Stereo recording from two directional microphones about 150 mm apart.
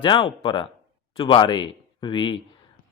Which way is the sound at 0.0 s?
35° left (ahead or behind).